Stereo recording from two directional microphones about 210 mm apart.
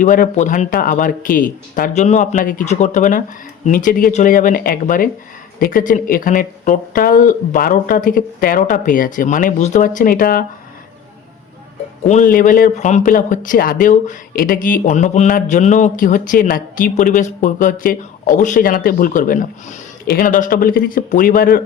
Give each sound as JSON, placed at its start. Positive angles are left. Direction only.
{"t": 0.0, "sound": "speech", "side_deg": 40}
{"t": 12.0, "sound": "speech", "side_deg": 35}